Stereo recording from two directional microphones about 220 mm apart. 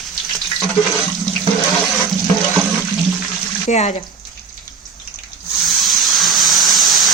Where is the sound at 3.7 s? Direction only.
30° left (ahead or behind).